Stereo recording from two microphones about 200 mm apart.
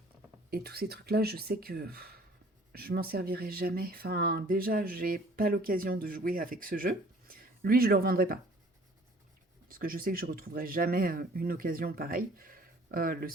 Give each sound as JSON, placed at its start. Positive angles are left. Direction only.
{"t": 0.5, "sound": "speech", "side_deg": -50}
{"t": 9.6, "sound": "speech", "side_deg": -45}